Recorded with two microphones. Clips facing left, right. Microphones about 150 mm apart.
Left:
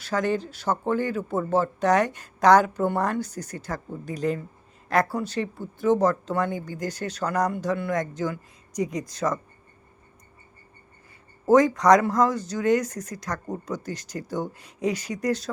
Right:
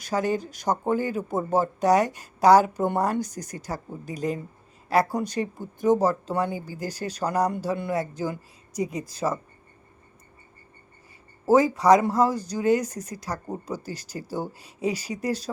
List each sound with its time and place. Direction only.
0.0 s speech: 10° right (ahead or behind)
8.8 s speech: 30° right (ahead or behind)
9.0 s speech: 10° right (ahead or behind)
11.4 s speech: 10° right (ahead or behind)